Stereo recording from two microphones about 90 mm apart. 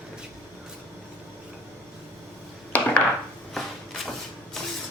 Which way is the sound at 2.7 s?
15° left (ahead or behind).